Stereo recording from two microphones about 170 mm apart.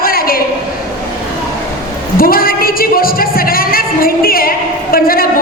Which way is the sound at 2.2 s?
60° left (ahead or behind).